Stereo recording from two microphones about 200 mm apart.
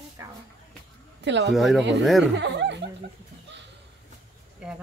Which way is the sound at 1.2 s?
60° right (ahead or behind).